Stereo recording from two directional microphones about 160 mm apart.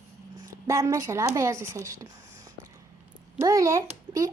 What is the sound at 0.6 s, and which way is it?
A woman's voice, 20° right (ahead or behind).